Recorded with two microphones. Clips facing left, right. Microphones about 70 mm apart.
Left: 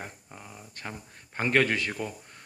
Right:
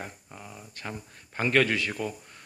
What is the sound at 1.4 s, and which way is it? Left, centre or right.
Speech, left.